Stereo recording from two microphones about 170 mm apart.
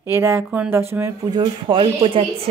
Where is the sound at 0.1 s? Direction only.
15° right (ahead or behind).